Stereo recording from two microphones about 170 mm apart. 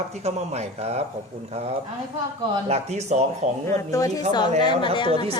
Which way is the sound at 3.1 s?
40° right (ahead or behind).